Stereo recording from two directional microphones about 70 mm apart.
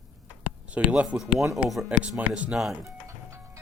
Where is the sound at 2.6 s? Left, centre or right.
Centre.